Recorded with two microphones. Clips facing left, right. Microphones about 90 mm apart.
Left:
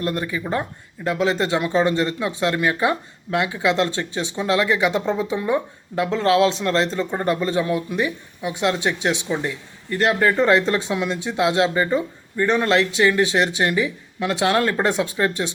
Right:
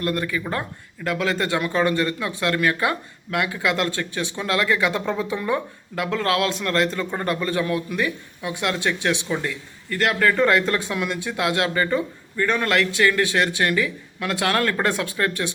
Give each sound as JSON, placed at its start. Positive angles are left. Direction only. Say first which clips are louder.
{"t": 0.0, "sound": "speech", "louder": "even", "side_deg": 20}